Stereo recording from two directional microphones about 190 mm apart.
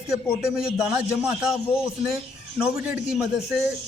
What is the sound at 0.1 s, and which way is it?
A man's voice, 5° right (ahead or behind).